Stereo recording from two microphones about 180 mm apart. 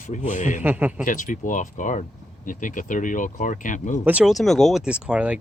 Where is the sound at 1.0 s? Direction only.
45° left (ahead or behind).